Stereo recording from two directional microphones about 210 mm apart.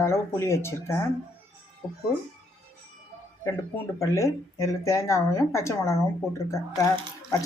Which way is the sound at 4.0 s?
15° left (ahead or behind).